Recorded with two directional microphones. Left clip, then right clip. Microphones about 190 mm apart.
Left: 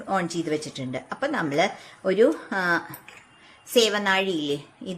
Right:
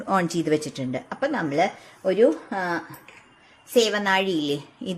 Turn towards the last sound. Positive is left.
turn(degrees=-20)  # may be behind; listen again after turning